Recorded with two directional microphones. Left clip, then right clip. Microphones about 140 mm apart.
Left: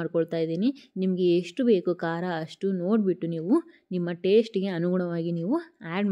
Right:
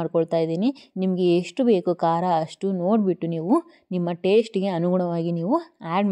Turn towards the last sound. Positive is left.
turn(degrees=-35)  # may be behind; listen again after turning